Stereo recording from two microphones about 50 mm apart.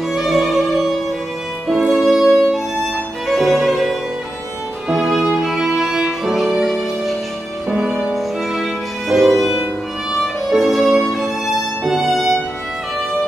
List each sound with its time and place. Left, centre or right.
0.1 s music: centre
7.7 s music: right
9.1 s music: centre